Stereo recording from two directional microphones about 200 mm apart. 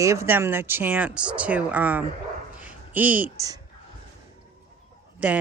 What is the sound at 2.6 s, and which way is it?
Dog, 10° right (ahead or behind).